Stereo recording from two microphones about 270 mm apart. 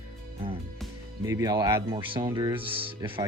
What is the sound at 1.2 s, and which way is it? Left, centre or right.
Speech, centre.